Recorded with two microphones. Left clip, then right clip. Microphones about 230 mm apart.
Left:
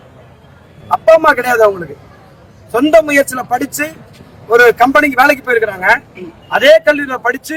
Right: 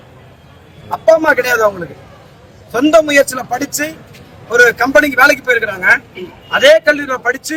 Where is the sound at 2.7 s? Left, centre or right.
Centre.